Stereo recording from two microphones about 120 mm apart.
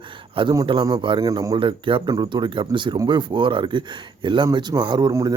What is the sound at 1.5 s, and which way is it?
Speech, 45° right (ahead or behind).